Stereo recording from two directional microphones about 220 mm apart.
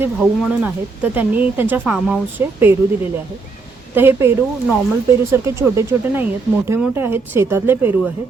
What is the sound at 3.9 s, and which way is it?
Speech, 10° right (ahead or behind).